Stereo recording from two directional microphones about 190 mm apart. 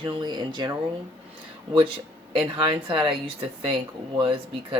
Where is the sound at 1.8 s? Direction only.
25° right (ahead or behind).